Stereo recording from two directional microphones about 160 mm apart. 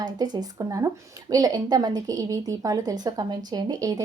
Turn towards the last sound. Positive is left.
turn(degrees=-25)  # may be behind; listen again after turning